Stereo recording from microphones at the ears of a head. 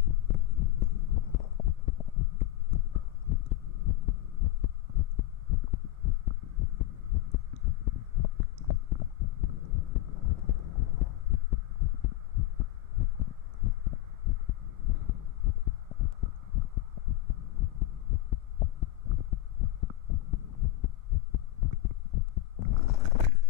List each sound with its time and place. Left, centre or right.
0.0 s heart sounds: left